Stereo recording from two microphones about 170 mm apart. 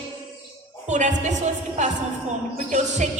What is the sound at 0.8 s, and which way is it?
A woman's voice, 45° right (ahead or behind).